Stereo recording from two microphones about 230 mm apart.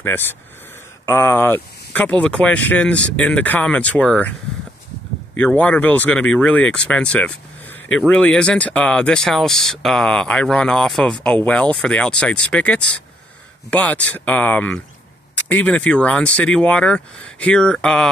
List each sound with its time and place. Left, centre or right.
0.0 s speech: centre